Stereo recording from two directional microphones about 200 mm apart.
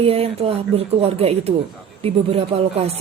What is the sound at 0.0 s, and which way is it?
Speech, 30° right (ahead or behind).